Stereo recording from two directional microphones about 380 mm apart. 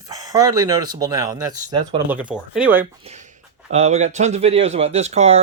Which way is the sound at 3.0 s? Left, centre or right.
Centre.